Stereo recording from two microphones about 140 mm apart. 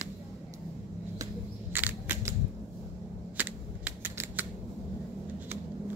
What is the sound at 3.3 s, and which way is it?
Typing, 10° right (ahead or behind).